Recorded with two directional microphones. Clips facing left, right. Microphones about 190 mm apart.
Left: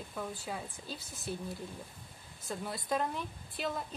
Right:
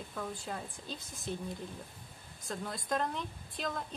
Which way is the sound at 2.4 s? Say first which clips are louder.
Left 1 dB; 5° left (ahead or behind).